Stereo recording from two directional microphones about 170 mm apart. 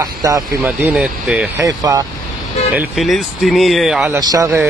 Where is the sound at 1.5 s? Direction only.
20° right (ahead or behind).